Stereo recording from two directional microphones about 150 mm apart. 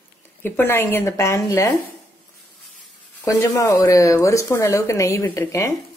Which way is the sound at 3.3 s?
20° left (ahead or behind).